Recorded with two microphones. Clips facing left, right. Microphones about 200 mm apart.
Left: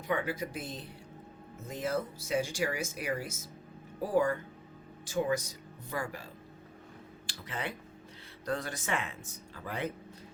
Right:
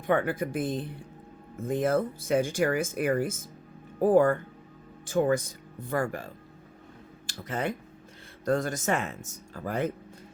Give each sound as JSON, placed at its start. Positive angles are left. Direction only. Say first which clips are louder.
{"t": 0.1, "sound": "speech", "louder": "right 7 dB", "side_deg": -55}